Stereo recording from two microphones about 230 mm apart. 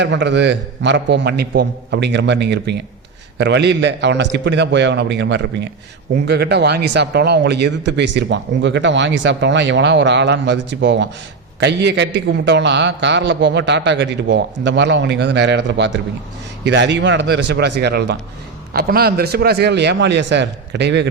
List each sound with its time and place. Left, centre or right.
0.0 s speech: right